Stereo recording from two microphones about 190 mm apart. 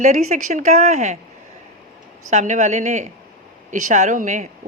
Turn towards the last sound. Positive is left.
turn(degrees=-40)  # may be behind; listen again after turning